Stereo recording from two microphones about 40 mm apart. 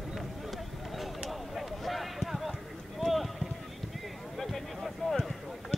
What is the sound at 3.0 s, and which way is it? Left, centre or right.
Clip-clop, centre.